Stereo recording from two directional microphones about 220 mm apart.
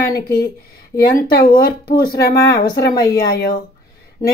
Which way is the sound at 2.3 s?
15° left (ahead or behind).